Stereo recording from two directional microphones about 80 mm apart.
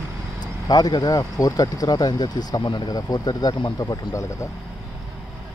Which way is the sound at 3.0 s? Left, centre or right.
Left.